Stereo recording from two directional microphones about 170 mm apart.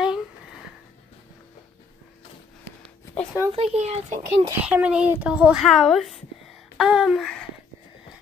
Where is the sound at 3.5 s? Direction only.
40° right (ahead or behind).